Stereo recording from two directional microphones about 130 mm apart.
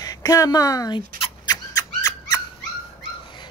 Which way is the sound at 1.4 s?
30° left (ahead or behind).